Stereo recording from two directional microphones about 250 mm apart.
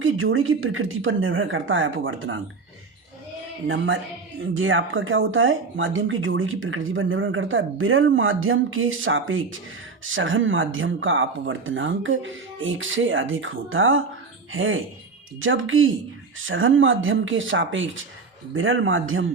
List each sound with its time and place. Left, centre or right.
0.0 s speech: right
4.4 s speech: right